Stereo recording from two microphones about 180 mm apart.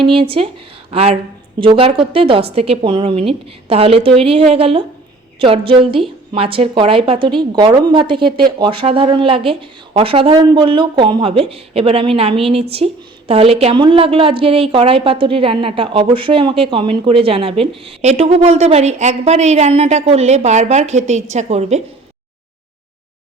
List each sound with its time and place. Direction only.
0.0 s a woman's voice: 30° right (ahead or behind)